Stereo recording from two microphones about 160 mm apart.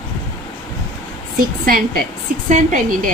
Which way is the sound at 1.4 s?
65° right (ahead or behind).